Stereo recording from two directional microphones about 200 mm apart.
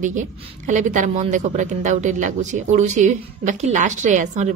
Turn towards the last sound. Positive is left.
turn(degrees=-35)  # may be behind; listen again after turning